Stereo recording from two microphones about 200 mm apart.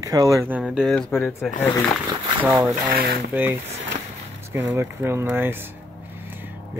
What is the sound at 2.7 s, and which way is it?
Speech, 45° right (ahead or behind).